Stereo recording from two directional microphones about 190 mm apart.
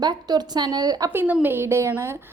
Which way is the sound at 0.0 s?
20° right (ahead or behind).